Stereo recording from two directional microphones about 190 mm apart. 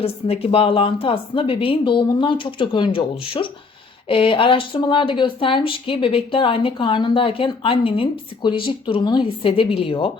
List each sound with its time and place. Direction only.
0.0 s speech: 30° left (ahead or behind)